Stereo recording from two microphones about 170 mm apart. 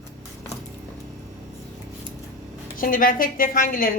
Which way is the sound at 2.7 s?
55° left (ahead or behind).